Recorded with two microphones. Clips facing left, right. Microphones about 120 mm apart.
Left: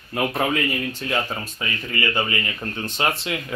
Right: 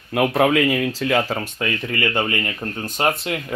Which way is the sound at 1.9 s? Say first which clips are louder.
Right 1 dB; 55° right (ahead or behind).